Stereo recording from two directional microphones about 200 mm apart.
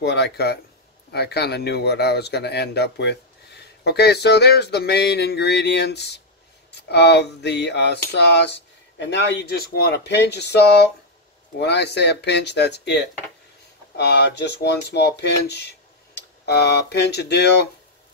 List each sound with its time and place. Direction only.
0.0 s speech: 55° left (ahead or behind)